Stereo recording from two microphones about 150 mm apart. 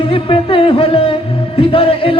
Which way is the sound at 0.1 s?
35° left (ahead or behind).